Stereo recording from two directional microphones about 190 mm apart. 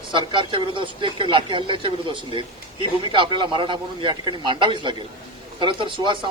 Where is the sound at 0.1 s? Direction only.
25° right (ahead or behind).